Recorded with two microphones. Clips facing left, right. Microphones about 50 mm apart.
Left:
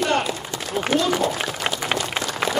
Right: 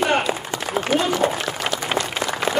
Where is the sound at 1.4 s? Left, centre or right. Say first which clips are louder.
Right 1 dB; centre.